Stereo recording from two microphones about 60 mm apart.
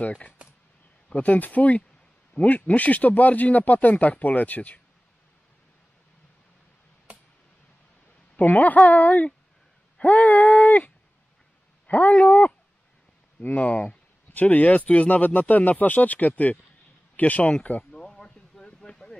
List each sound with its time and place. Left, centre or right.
0.0 s speech: left
8.4 s speech: left
9.9 s a sound: left
11.9 s speech: left
13.4 s speech: left
17.9 s a sound: centre